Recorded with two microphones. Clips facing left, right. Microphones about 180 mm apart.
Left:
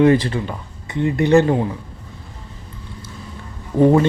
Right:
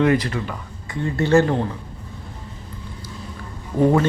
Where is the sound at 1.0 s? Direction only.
15° left (ahead or behind).